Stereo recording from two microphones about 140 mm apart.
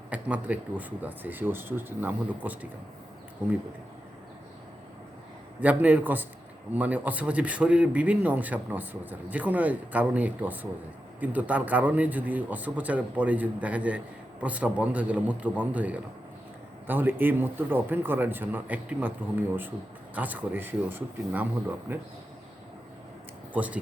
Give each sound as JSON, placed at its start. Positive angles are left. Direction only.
{"t": 0.1, "sound": "a man's voice", "side_deg": -10}
{"t": 5.5, "sound": "a man's voice", "side_deg": -10}
{"t": 20.1, "sound": "a man's voice", "side_deg": -10}
{"t": 23.6, "sound": "a man's voice", "side_deg": -10}